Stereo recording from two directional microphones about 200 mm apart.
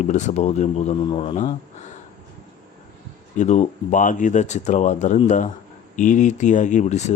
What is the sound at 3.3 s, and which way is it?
Speech, 35° left (ahead or behind).